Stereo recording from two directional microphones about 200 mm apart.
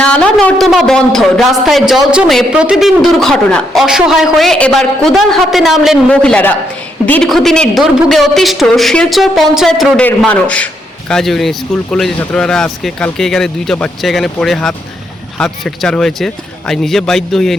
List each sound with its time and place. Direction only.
0.0 s a man's voice: 5° left (ahead or behind)